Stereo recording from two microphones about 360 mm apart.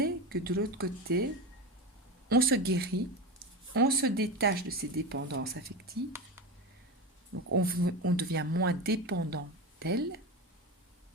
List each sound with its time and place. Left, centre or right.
0.0 s speech: right
2.3 s speech: right
7.5 s speech: right
7.8 s speech: right
8.1 s speech: right